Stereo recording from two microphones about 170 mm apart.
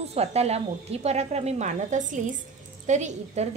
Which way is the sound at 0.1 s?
40° right (ahead or behind).